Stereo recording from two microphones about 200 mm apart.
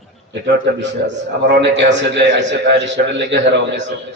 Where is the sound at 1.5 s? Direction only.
60° right (ahead or behind).